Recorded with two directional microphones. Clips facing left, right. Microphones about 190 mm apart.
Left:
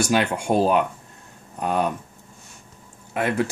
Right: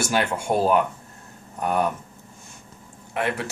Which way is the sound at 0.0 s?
20° left (ahead or behind).